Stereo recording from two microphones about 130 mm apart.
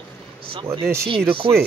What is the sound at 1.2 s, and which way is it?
Speech, 40° right (ahead or behind).